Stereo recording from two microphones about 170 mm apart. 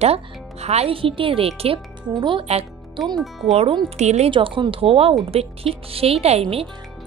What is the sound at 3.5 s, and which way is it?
Speech, 35° right (ahead or behind).